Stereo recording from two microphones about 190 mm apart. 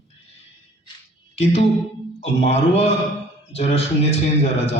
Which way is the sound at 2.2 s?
35° left (ahead or behind).